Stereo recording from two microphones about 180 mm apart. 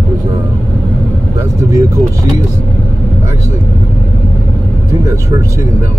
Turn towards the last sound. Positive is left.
turn(degrees=-15)  # may be behind; listen again after turning